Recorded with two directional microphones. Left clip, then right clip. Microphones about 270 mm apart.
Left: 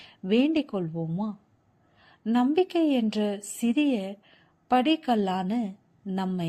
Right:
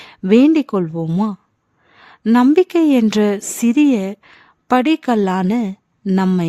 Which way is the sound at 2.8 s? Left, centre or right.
Right.